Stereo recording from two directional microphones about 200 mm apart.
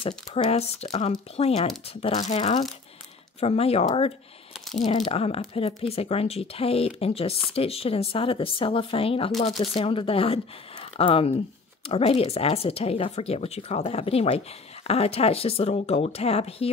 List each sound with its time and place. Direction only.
0.0 s speech: 30° left (ahead or behind)